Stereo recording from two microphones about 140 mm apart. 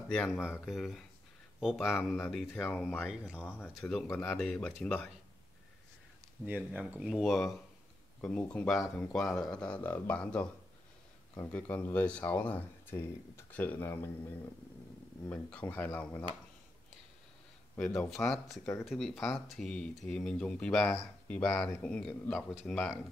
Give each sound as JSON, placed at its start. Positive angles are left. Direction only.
{"t": 0.1, "sound": "speech", "side_deg": 5}
{"t": 0.4, "sound": "speech", "side_deg": -5}
{"t": 2.6, "sound": "speech", "side_deg": 10}
{"t": 3.0, "sound": "speech", "side_deg": -5}
{"t": 3.3, "sound": "speech", "side_deg": 10}
{"t": 4.1, "sound": "speech", "side_deg": 15}
{"t": 4.4, "sound": "speech", "side_deg": 5}
{"t": 6.4, "sound": "speech", "side_deg": -10}
{"t": 15.2, "sound": "speech", "side_deg": 10}
{"t": 17.7, "sound": "speech", "side_deg": 10}